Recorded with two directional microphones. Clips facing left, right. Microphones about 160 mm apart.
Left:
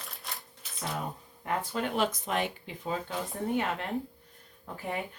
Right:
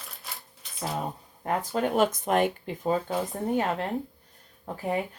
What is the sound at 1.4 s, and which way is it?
Speech, 40° right (ahead or behind).